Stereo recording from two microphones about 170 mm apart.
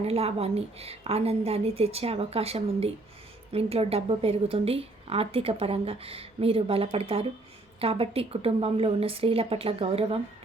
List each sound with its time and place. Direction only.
0.0 s speech: 35° right (ahead or behind)